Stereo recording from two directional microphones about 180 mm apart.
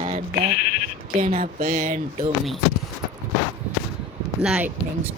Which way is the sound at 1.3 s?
35° right (ahead or behind).